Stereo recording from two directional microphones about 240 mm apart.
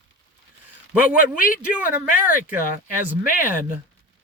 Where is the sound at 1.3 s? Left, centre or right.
Left.